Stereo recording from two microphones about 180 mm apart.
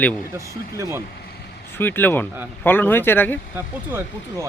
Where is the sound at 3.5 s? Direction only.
10° right (ahead or behind).